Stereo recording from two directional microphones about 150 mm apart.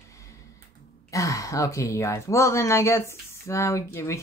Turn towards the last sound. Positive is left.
turn(degrees=20)  # may be behind; listen again after turning